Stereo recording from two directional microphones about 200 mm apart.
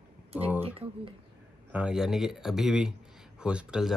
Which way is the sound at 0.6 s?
30° right (ahead or behind).